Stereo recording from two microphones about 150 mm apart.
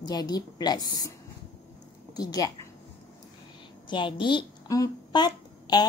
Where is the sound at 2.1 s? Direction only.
25° left (ahead or behind).